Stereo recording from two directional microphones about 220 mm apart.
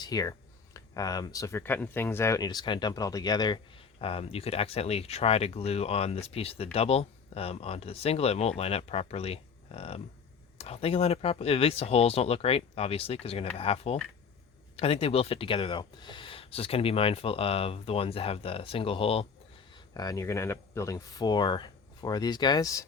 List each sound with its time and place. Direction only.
0.0 s speech: 15° left (ahead or behind)